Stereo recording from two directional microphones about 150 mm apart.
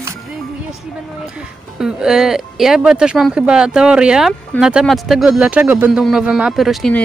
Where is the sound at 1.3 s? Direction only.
5° right (ahead or behind).